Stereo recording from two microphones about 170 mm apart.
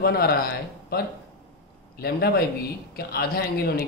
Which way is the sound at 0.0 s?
65° left (ahead or behind).